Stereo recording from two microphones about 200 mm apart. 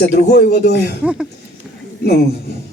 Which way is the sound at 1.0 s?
5° right (ahead or behind).